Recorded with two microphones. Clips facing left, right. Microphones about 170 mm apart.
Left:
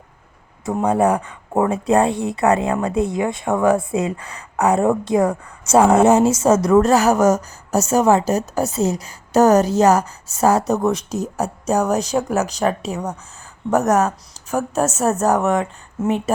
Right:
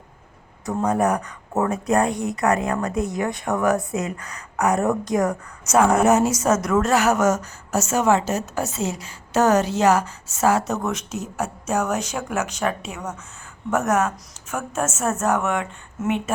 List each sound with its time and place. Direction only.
0.6 s a woman's voice: 25° left (ahead or behind)